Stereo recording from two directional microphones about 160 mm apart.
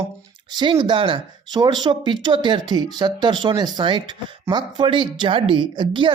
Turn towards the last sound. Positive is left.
turn(degrees=-30)  # may be behind; listen again after turning